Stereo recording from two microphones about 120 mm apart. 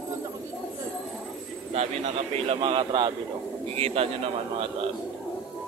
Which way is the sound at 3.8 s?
55° right (ahead or behind).